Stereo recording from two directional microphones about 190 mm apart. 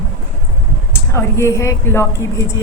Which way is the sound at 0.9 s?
15° left (ahead or behind).